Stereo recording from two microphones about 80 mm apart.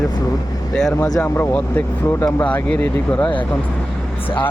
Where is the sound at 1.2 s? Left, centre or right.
Centre.